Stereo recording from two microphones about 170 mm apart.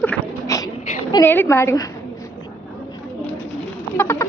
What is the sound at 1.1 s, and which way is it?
Speech, 15° left (ahead or behind).